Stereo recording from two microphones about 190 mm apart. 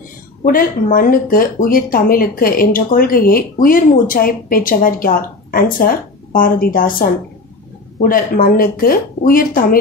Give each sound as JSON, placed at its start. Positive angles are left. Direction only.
{"t": 0.5, "sound": "speech", "side_deg": 50}